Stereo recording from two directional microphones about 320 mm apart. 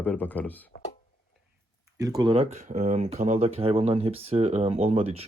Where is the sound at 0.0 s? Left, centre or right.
Centre.